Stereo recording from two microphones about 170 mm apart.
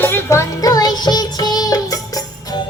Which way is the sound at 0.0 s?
15° left (ahead or behind).